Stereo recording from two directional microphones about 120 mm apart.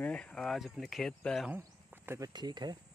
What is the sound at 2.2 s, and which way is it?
Speech, 35° right (ahead or behind).